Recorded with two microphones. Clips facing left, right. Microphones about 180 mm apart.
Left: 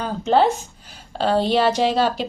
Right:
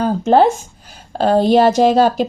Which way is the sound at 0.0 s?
50° right (ahead or behind).